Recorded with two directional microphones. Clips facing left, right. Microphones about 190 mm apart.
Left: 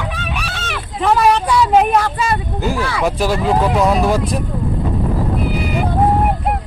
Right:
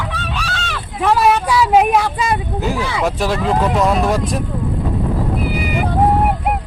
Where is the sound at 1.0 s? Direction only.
Centre (ahead or behind).